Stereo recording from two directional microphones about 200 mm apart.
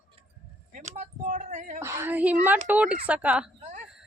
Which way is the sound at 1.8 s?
10° right (ahead or behind).